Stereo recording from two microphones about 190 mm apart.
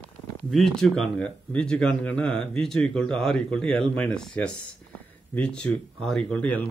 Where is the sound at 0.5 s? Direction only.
Centre (ahead or behind).